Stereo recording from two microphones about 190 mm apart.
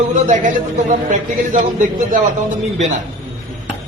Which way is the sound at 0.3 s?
40° right (ahead or behind).